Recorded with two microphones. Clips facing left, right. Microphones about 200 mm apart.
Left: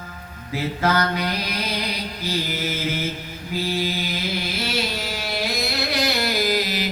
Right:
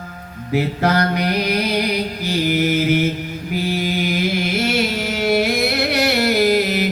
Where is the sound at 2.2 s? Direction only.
65° right (ahead or behind).